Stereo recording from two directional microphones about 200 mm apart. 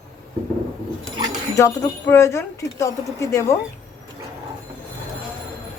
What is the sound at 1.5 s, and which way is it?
Speech, 15° left (ahead or behind).